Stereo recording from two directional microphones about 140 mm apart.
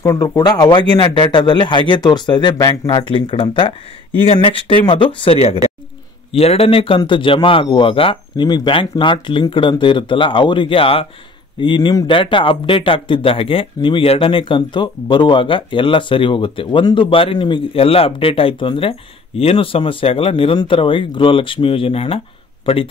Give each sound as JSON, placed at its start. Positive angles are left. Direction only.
{"t": 0.0, "sound": "a man's voice", "side_deg": 20}